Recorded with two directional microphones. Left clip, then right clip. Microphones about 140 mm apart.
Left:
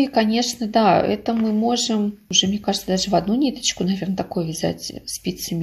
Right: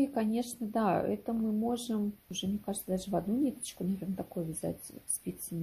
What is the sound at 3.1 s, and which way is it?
Speech, 10° right (ahead or behind).